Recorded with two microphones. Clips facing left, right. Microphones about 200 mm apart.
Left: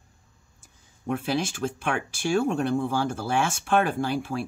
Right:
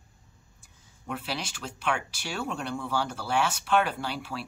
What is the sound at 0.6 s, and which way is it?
Speech, 50° left (ahead or behind).